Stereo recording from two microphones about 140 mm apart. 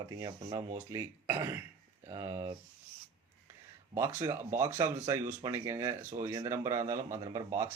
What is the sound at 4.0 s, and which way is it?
Speech, 20° right (ahead or behind).